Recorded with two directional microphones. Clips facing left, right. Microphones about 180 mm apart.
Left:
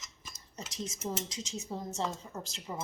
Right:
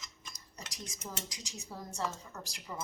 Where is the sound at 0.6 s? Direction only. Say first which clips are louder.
Left 8 dB; 25° left (ahead or behind).